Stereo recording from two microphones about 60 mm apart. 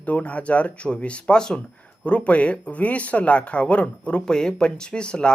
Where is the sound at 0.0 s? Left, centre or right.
Left.